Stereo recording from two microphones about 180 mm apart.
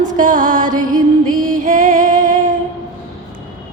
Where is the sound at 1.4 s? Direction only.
50° right (ahead or behind).